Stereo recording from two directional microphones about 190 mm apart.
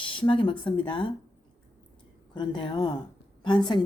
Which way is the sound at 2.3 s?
25° left (ahead or behind).